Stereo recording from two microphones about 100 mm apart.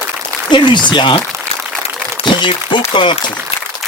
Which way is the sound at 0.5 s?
50° left (ahead or behind).